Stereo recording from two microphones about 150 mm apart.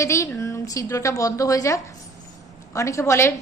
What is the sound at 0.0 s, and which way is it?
A woman's voice, 20° left (ahead or behind).